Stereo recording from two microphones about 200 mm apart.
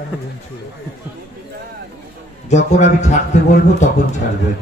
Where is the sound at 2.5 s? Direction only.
35° left (ahead or behind).